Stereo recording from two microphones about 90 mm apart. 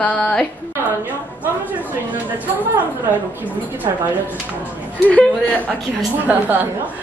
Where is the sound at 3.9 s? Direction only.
45° right (ahead or behind).